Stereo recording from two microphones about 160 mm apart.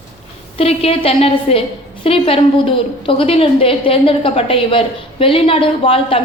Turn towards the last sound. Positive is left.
turn(degrees=35)  # may be behind; listen again after turning